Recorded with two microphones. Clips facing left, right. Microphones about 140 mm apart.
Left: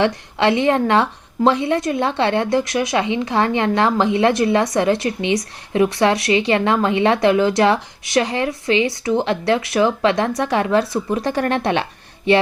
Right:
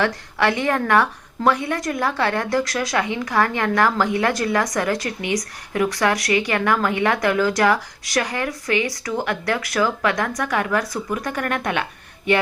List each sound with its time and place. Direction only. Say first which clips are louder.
0.0 s speech: left 3 dB; 25° left (ahead or behind)